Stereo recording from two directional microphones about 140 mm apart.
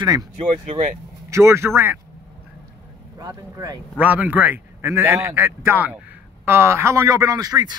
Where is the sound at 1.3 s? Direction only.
20° right (ahead or behind).